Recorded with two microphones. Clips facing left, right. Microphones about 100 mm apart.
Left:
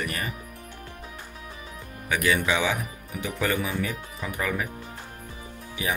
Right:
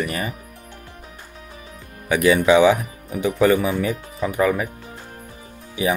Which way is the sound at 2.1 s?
15° right (ahead or behind).